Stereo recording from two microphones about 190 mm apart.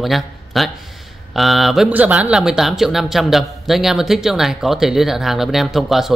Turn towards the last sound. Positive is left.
turn(degrees=0)  # may be behind; listen again after turning